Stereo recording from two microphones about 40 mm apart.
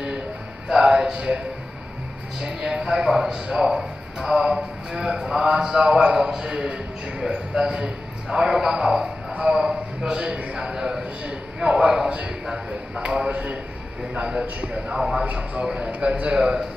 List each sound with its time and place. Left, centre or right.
0.7 s music: centre
2.4 s speech: centre
6.5 s a man's voice: right
15.0 s speech: centre
15.2 s a man's voice: right